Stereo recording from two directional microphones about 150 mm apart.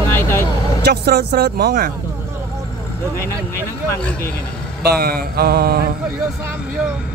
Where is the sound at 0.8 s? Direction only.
90° right.